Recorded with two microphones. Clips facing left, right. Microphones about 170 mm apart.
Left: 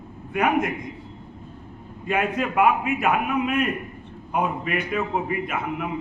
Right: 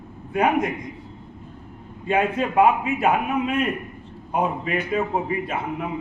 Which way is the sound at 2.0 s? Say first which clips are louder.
Right 2 dB; 30° right (ahead or behind).